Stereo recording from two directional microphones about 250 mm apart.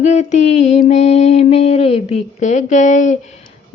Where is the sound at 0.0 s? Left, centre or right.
Left.